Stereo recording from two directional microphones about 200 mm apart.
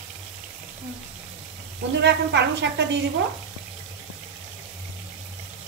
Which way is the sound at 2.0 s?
60° right (ahead or behind).